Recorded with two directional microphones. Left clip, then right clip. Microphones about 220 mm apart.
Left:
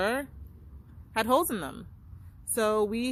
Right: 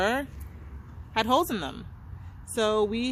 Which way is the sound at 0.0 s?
20° left (ahead or behind).